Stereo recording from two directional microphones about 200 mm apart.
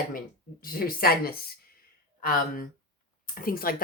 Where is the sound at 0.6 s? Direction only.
45° left (ahead or behind).